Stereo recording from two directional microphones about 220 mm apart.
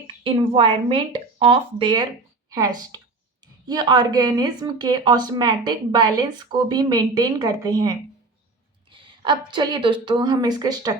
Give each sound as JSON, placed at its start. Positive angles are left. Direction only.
{"t": 0.3, "sound": "speech", "side_deg": -25}